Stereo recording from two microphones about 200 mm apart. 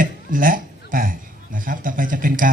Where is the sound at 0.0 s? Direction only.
45° right (ahead or behind).